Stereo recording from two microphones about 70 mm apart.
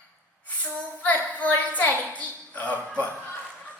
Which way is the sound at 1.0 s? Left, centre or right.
Left.